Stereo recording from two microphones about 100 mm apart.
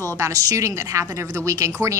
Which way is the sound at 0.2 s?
35° right (ahead or behind).